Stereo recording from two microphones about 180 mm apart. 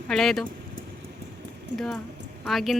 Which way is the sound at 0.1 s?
Centre (ahead or behind).